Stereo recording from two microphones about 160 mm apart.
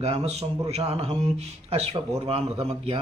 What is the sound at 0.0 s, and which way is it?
Speech, 40° right (ahead or behind).